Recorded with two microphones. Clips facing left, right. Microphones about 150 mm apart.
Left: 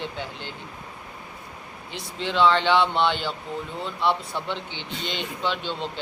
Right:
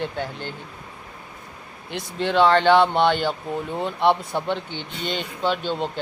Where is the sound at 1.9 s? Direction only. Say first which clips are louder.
Right 6 dB; 55° right (ahead or behind).